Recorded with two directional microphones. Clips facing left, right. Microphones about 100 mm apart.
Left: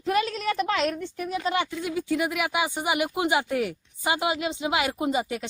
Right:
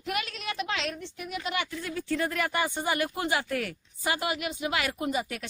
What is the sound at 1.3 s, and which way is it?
Speech, 35° left (ahead or behind).